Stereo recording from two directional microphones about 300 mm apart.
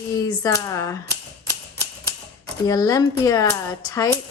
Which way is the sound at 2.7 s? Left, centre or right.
Centre.